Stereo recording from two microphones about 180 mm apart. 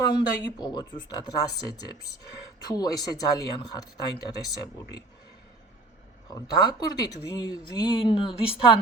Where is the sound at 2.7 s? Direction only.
20° left (ahead or behind).